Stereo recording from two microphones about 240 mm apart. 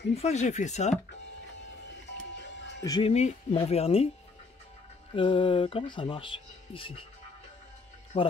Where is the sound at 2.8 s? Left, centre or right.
Left.